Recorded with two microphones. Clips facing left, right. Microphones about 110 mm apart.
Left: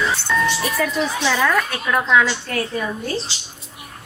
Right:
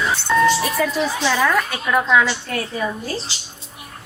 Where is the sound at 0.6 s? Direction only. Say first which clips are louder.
Right 1 dB; centre (ahead or behind).